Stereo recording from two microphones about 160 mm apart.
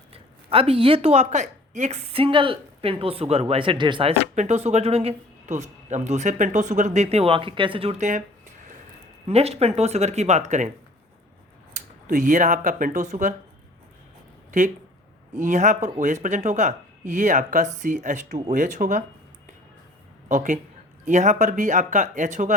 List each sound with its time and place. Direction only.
0.1 s speech: 35° right (ahead or behind)
4.4 s speech: 45° right (ahead or behind)
9.2 s speech: 40° right (ahead or behind)
12.0 s speech: 55° right (ahead or behind)
15.4 s speech: 50° right (ahead or behind)
20.2 s speech: 55° right (ahead or behind)